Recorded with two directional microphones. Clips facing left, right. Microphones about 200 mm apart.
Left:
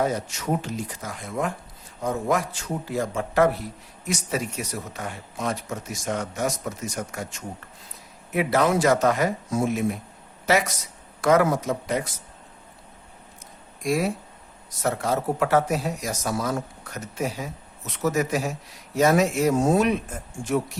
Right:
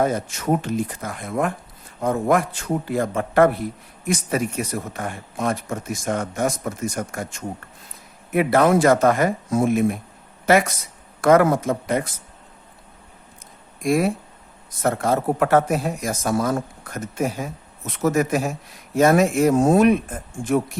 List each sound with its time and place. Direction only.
0.0 s a man's voice: 50° right (ahead or behind)
13.8 s a man's voice: 55° right (ahead or behind)